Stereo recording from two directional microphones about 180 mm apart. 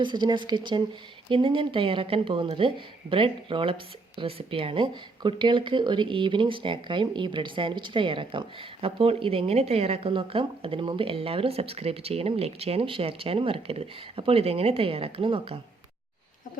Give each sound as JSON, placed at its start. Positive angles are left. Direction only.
{"t": 0.0, "sound": "speech", "side_deg": -25}